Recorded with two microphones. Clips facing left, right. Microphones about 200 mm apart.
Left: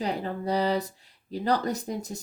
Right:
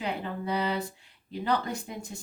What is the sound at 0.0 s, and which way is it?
Speech, 40° left (ahead or behind).